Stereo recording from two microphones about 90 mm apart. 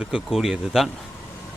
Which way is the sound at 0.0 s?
5° right (ahead or behind).